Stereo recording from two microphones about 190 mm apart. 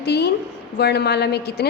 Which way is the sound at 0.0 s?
60° left (ahead or behind).